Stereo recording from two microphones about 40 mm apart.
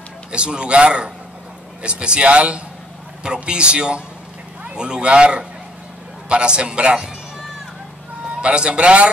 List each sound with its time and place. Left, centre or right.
0.3 s speech: right
8.4 s speech: right